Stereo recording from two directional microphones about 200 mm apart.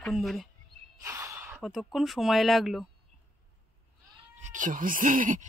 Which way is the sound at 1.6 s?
Centre (ahead or behind).